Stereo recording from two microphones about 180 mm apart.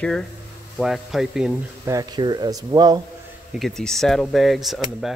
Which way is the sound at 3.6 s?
Centre (ahead or behind).